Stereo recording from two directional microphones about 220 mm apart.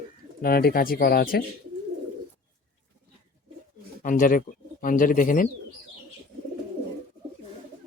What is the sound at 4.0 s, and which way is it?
A man's voice, 40° left (ahead or behind).